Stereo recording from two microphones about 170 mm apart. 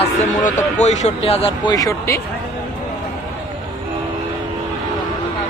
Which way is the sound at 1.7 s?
15° left (ahead or behind).